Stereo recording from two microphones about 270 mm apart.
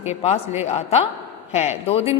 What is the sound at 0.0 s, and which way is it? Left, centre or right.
A woman's voice, left.